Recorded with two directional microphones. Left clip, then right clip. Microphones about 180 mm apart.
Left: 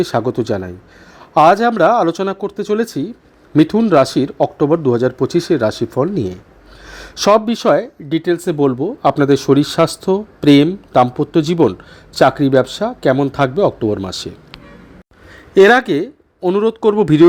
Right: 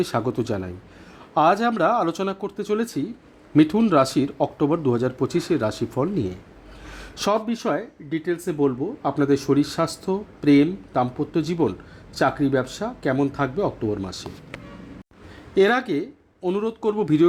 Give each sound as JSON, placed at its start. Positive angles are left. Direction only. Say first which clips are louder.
{"t": 0.0, "sound": "a man's voice", "louder": "left 7 dB", "side_deg": 25}
{"t": 6.8, "sound": "a sound", "louder": "left 11 dB", "side_deg": 25}
{"t": 7.3, "sound": "a man's voice", "louder": "left 11 dB", "side_deg": 45}
{"t": 15.5, "sound": "a man's voice", "louder": "left 10 dB", "side_deg": 35}